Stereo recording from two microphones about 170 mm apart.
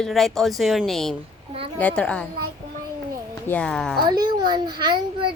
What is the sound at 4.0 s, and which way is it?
Speech, 25° right (ahead or behind).